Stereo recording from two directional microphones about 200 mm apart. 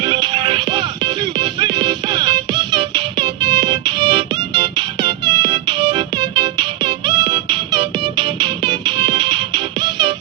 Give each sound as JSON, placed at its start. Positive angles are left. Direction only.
{"t": 0.0, "sound": "music", "side_deg": -25}